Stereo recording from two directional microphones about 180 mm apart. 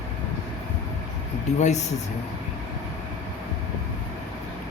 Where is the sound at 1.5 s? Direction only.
40° left (ahead or behind).